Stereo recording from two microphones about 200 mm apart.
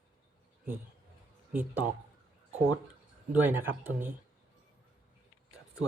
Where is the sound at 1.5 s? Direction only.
10° right (ahead or behind).